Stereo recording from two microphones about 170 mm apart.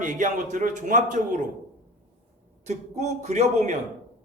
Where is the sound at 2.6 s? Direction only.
40° right (ahead or behind).